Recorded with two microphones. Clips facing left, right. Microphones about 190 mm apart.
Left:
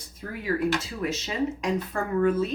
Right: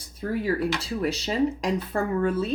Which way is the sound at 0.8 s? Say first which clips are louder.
Right 3 dB; 35° right (ahead or behind).